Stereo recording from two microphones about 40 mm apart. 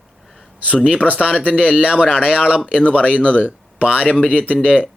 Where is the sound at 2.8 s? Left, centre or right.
Left.